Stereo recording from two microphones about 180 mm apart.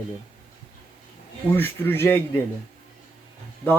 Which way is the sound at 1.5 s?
10° left (ahead or behind).